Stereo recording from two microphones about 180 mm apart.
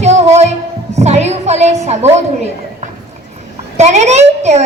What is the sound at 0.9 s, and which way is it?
A woman's voice, 40° right (ahead or behind).